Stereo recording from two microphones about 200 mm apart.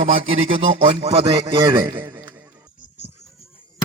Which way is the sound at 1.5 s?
20° right (ahead or behind).